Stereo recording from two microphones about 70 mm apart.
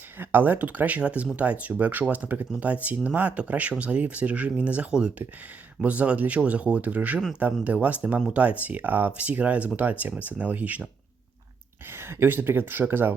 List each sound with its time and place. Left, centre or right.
0.2 s speech: right
11.9 s speech: right